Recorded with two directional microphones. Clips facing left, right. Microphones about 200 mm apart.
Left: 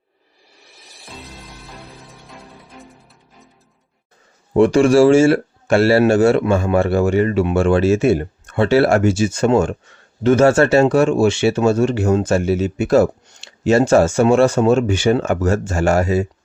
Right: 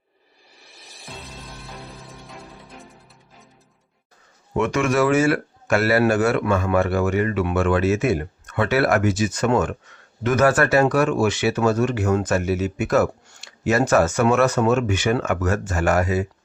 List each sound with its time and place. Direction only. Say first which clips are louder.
0.8 s music: left 1 dB; centre (ahead or behind)
4.5 s speech: left 9 dB; 30° left (ahead or behind)